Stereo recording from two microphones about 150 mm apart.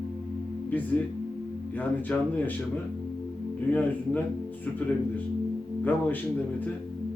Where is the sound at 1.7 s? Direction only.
10° left (ahead or behind).